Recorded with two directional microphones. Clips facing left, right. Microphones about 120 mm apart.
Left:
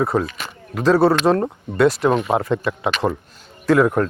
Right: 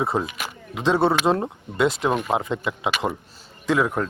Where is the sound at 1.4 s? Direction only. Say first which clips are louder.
Left 5 dB; 15° right (ahead or behind).